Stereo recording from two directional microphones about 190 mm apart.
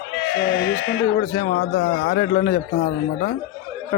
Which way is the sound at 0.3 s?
70° left (ahead or behind).